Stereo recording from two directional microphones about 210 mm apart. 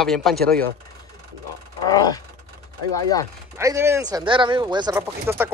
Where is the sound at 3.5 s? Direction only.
15° right (ahead or behind).